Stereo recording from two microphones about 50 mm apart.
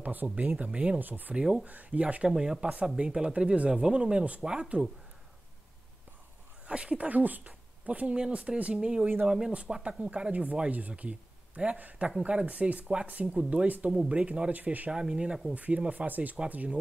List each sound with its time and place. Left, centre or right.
0.0 s speech: right
0.9 s speech: right
1.3 s speech: centre
2.2 s speech: centre
6.7 s speech: right
13.8 s speech: centre
14.5 s speech: right
14.9 s speech: centre
15.5 s speech: right